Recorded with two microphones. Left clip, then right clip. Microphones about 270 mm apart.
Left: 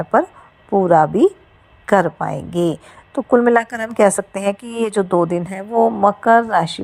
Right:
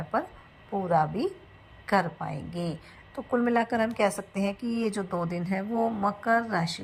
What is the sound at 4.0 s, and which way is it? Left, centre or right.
Speech, left.